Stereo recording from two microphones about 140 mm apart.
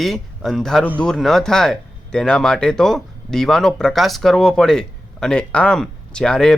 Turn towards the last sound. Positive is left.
turn(degrees=5)  # may be behind; listen again after turning